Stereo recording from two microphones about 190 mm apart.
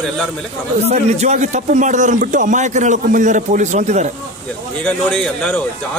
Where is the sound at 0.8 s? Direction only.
35° right (ahead or behind).